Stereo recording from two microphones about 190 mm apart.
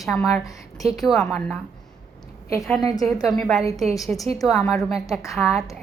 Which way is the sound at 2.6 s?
Centre (ahead or behind).